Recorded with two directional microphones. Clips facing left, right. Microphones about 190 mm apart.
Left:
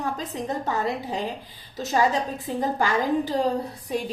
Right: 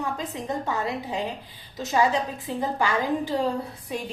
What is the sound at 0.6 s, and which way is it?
A woman's voice, 40° left (ahead or behind).